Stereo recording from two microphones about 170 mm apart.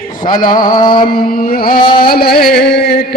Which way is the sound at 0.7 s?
25° left (ahead or behind).